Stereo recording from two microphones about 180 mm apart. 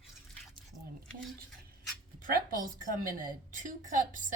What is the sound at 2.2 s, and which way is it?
A woman's voice, 50° right (ahead or behind).